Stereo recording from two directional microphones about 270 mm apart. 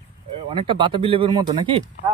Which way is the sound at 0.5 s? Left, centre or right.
Centre.